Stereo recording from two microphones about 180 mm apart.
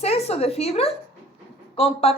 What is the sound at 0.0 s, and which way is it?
A woman's voice, 35° left (ahead or behind).